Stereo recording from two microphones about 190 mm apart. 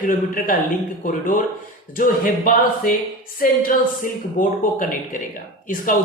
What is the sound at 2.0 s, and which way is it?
Speech, 45° left (ahead or behind).